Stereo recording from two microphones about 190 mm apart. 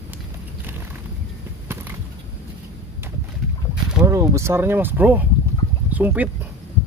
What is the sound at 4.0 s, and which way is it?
Speech, 15° right (ahead or behind).